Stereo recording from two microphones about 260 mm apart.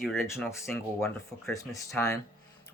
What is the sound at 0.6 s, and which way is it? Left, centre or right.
Speech, centre.